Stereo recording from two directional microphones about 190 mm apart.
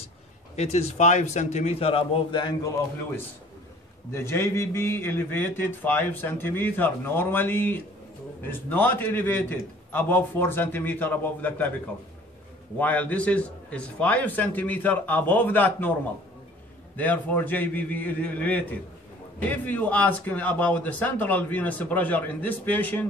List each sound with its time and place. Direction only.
0.6 s a man's voice: 35° left (ahead or behind)
4.1 s a man's voice: 15° left (ahead or behind)
12.7 s a man's voice: 10° left (ahead or behind)
16.9 s a man's voice: 10° left (ahead or behind)